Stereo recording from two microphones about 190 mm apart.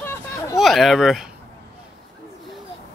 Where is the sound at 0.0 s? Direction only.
10° left (ahead or behind).